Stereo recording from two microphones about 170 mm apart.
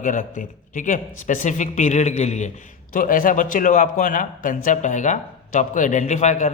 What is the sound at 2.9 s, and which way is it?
A man's voice, 55° left (ahead or behind).